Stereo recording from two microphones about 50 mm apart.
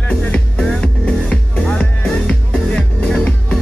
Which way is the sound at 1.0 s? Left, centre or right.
Left.